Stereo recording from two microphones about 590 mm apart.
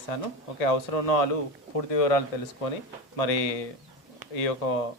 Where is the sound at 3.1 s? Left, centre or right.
Left.